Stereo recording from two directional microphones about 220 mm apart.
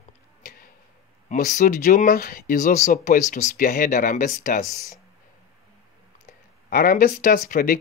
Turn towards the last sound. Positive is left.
turn(degrees=40)  # may be behind; listen again after turning